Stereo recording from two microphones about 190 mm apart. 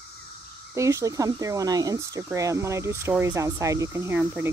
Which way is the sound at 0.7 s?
15° right (ahead or behind).